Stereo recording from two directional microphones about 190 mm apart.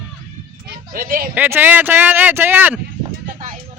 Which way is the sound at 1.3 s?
10° right (ahead or behind).